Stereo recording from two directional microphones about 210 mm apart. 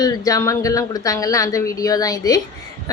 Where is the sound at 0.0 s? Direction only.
15° left (ahead or behind).